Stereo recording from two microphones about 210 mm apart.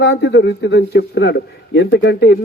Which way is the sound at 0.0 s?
55° left (ahead or behind).